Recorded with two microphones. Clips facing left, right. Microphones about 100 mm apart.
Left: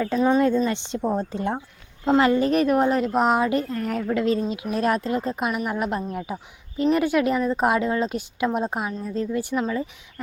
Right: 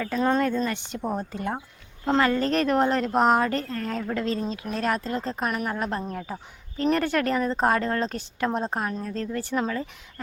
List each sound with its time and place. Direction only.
0.0 s speech: 15° left (ahead or behind)
0.6 s speech: 20° left (ahead or behind); by 9.9 s 5° left (ahead or behind)